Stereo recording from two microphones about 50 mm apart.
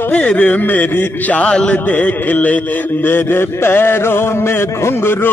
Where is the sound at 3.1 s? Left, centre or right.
Left.